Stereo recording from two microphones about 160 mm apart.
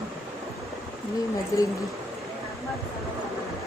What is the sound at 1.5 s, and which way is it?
Speech, 20° left (ahead or behind).